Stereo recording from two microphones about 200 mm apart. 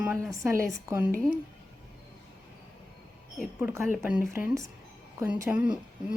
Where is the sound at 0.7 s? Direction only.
15° right (ahead or behind).